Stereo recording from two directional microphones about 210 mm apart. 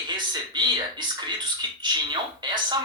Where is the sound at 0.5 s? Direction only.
20° right (ahead or behind).